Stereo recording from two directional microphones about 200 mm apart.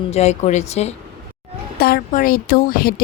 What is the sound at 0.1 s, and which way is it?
Speech, 35° left (ahead or behind).